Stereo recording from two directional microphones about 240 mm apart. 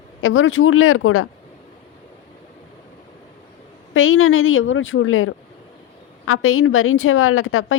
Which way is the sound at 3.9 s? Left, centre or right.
Left.